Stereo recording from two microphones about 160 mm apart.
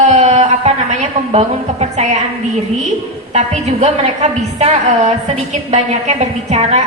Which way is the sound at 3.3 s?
45° right (ahead or behind).